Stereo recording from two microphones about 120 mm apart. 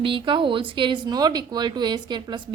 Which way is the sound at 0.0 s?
45° right (ahead or behind).